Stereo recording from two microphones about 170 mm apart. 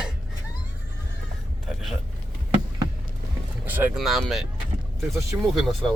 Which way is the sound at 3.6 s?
10° right (ahead or behind).